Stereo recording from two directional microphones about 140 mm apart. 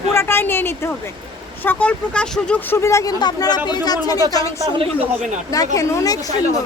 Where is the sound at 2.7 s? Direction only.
20° left (ahead or behind).